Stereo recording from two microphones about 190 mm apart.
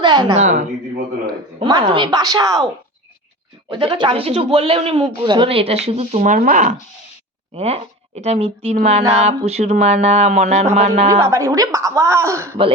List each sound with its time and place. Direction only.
0.0 s a sound: 20° right (ahead or behind)
0.3 s a man's voice: 40° right (ahead or behind)
1.6 s speech: 25° right (ahead or behind)
3.7 s a man's voice: 25° right (ahead or behind)
11.1 s speech: 15° right (ahead or behind)